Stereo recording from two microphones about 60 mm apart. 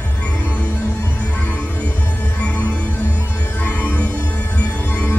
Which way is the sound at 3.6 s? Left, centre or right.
Left.